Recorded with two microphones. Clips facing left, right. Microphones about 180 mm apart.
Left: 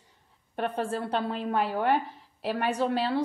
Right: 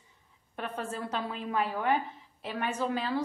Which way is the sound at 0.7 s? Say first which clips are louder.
Left 4 dB; 30° left (ahead or behind).